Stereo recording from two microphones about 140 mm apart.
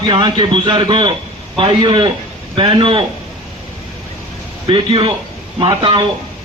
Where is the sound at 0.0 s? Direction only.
35° right (ahead or behind).